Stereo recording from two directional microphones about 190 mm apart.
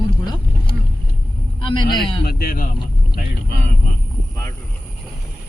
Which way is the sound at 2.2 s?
55° left (ahead or behind).